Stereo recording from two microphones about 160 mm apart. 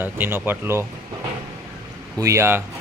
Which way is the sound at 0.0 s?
15° right (ahead or behind).